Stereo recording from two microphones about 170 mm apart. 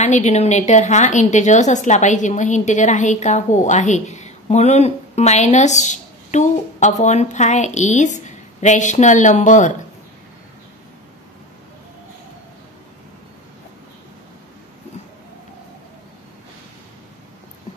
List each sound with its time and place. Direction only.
0.0 s a woman's voice: 40° left (ahead or behind)